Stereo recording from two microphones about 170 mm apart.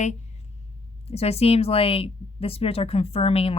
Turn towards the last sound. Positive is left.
turn(degrees=35)  # may be behind; listen again after turning